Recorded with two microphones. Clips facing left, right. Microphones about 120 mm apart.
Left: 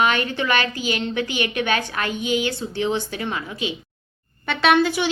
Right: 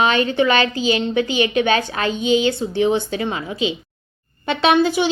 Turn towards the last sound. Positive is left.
turn(degrees=-20)  # may be behind; listen again after turning